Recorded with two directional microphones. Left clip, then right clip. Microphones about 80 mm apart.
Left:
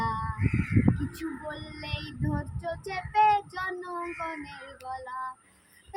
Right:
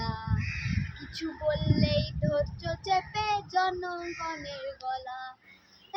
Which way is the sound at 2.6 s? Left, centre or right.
Right.